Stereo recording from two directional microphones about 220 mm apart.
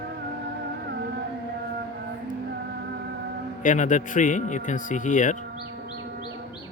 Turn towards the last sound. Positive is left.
turn(degrees=35)  # may be behind; listen again after turning